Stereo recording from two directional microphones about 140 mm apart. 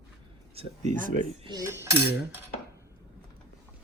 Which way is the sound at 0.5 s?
55° right (ahead or behind).